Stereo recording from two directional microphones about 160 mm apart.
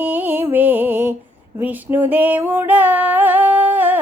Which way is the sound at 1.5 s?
10° right (ahead or behind).